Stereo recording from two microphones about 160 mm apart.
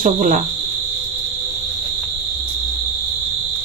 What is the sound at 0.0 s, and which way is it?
Cricket, 60° right (ahead or behind).